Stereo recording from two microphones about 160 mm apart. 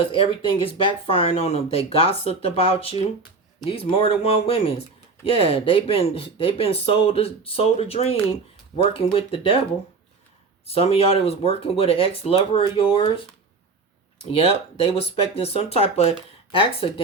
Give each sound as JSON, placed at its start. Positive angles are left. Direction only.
{"t": 0.0, "sound": "speech", "side_deg": 35}
{"t": 10.7, "sound": "speech", "side_deg": 35}
{"t": 14.9, "sound": "speech", "side_deg": 40}